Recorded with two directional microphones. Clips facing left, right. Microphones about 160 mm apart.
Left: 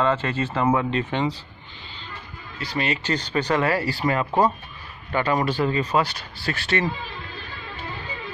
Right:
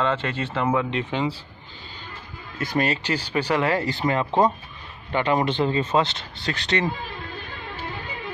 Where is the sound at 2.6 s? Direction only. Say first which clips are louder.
Right 3 dB; 45° right (ahead or behind).